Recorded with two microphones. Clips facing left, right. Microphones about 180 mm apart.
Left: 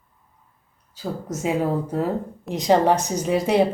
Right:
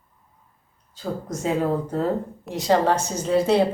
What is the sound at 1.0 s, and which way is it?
Speech, 10° left (ahead or behind).